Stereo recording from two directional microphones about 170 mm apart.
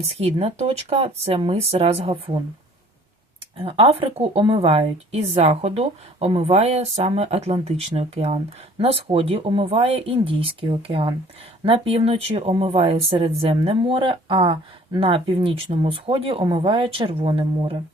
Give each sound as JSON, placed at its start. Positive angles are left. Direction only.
{"t": 0.0, "sound": "a woman's voice", "side_deg": -35}
{"t": 3.6, "sound": "a woman's voice", "side_deg": -35}